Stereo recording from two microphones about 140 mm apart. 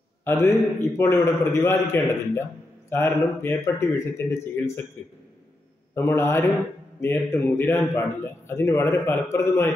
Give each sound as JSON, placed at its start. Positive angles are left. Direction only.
{"t": 0.2, "sound": "a man's voice", "side_deg": 15}
{"t": 5.9, "sound": "a man's voice", "side_deg": 20}